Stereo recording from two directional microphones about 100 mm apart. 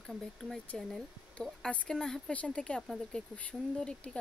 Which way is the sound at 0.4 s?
5° left (ahead or behind).